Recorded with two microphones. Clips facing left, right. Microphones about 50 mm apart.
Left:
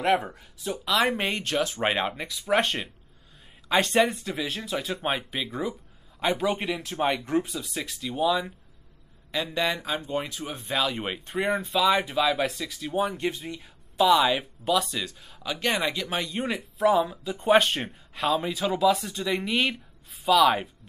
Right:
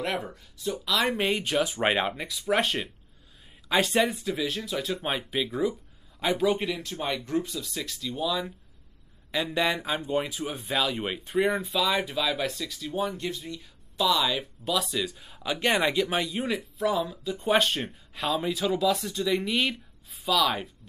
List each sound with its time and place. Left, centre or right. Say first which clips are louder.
0.3 s speech: right 1 dB; centre
1.4 s speech: right 1 dB; centre
2.1 s speech: left 2 dB; centre
6.7 s speech: left 4 dB; left
9.3 s speech: right 1 dB; centre
10.7 s speech: left 1 dB; centre
13.2 s speech: left 4 dB; left
14.6 s speech: left 1 dB; centre
15.0 s speech: right 2 dB; centre
16.4 s speech: left 4 dB; centre